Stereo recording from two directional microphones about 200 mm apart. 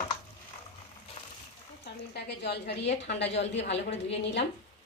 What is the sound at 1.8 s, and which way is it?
A woman's voice, 55° left (ahead or behind).